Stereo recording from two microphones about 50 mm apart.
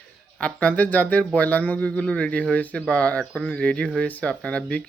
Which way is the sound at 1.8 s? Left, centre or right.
Left.